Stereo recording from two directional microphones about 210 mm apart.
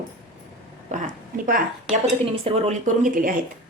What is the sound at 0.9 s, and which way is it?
Speech, 35° right (ahead or behind).